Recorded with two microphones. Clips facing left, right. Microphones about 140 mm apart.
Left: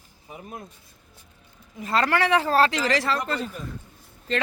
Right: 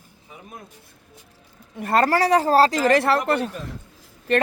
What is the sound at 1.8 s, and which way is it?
Speech, 60° right (ahead or behind).